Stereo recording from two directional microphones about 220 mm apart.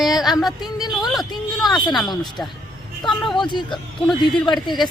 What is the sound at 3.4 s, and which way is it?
Speech, 20° left (ahead or behind).